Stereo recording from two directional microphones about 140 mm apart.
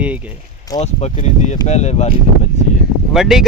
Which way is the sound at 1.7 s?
50° left (ahead or behind).